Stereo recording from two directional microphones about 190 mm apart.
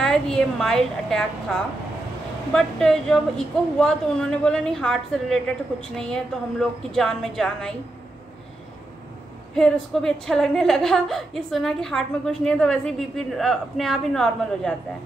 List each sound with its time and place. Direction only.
0.0 s a woman's voice: 5° left (ahead or behind)
2.5 s a woman's voice: 5° left (ahead or behind)
9.5 s a woman's voice: 5° left (ahead or behind)